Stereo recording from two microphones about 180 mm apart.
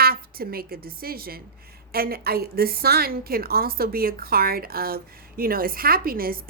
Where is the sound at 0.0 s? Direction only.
55° right (ahead or behind).